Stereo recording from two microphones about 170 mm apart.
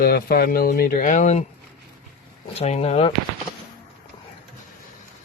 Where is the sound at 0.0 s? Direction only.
65° left (ahead or behind); by 1.5 s 45° left (ahead or behind).